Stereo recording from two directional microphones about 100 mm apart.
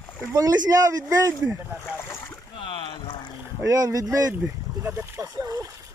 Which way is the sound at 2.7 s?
55° left (ahead or behind).